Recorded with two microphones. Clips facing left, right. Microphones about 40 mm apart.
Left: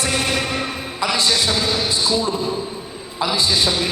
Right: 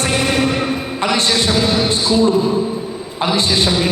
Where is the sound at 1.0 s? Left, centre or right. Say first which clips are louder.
Right 2 dB; right.